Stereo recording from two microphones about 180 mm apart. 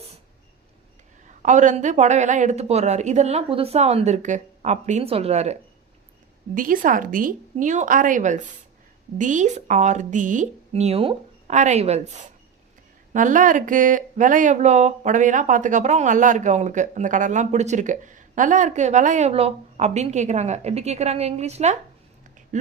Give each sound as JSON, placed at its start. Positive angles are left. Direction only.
{"t": 1.4, "sound": "speech", "side_deg": -45}
{"t": 6.5, "sound": "a woman's voice", "side_deg": -50}